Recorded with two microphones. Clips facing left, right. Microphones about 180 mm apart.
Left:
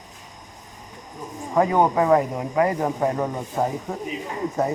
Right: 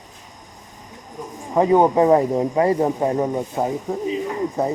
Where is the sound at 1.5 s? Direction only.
20° right (ahead or behind).